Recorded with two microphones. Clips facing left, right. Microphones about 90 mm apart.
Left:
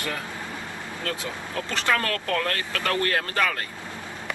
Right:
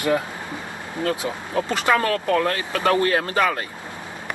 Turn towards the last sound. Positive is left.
turn(degrees=-20)  # may be behind; listen again after turning